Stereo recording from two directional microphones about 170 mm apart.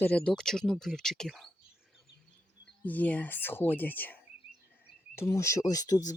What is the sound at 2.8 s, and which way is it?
Speech, 10° left (ahead or behind).